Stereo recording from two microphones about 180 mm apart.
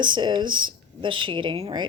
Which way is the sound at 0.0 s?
25° right (ahead or behind).